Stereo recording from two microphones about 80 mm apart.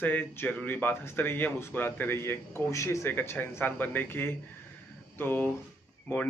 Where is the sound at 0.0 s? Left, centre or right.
Left.